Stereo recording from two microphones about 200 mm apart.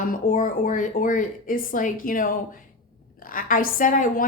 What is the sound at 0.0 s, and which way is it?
A woman's voice, 40° left (ahead or behind).